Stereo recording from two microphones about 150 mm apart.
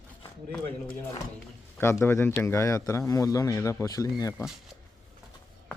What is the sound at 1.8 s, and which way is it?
A man's voice, 15° left (ahead or behind).